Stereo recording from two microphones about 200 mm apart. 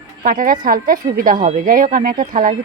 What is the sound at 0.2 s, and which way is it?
A woman's voice, 45° right (ahead or behind).